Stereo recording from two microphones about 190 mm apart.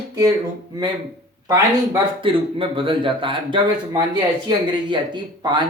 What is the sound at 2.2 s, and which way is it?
Speech, 25° right (ahead or behind).